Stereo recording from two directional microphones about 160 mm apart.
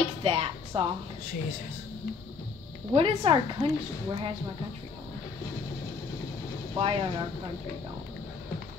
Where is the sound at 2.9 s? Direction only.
35° right (ahead or behind).